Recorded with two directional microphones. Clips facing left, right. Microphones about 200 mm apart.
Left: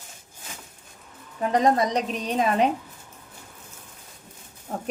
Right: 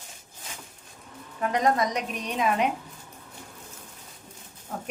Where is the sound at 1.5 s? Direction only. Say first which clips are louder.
Left 3 dB; 30° left (ahead or behind).